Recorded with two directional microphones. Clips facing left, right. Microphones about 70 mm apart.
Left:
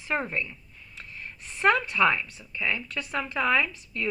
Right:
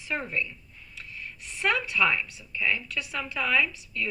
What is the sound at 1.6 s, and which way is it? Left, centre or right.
Speech, left.